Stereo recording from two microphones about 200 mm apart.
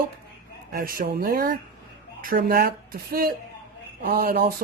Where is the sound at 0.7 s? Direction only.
45° right (ahead or behind).